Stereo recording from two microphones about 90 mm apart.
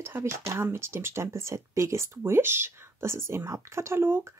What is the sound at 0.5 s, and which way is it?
Speech, 30° right (ahead or behind).